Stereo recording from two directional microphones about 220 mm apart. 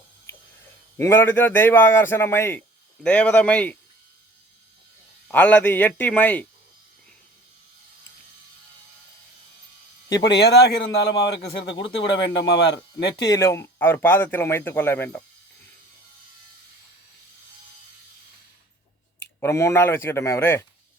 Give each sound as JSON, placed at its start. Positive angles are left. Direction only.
{"t": 0.9, "sound": "a man's voice", "side_deg": 10}
{"t": 5.3, "sound": "a man's voice", "side_deg": 5}
{"t": 10.1, "sound": "speech", "side_deg": 20}
{"t": 10.3, "sound": "a man's voice", "side_deg": 50}
{"t": 11.1, "sound": "a man's voice", "side_deg": 20}
{"t": 19.4, "sound": "a man's voice", "side_deg": 10}